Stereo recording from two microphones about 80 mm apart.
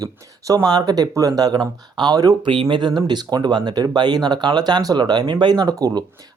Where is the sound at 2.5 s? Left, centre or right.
Right.